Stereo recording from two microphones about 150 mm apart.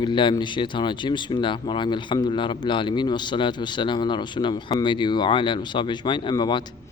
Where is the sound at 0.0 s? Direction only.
30° left (ahead or behind).